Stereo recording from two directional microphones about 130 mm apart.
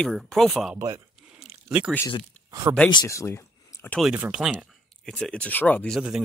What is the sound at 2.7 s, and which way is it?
Speech, 25° right (ahead or behind).